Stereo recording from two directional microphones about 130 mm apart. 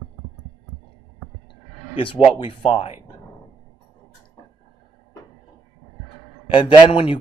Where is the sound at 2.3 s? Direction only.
45° left (ahead or behind).